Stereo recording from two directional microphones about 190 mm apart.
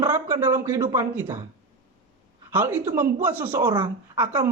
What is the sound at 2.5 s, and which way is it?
Speech, 10° right (ahead or behind).